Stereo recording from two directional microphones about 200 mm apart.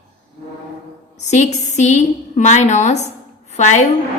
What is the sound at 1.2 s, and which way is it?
A woman's voice, 35° left (ahead or behind).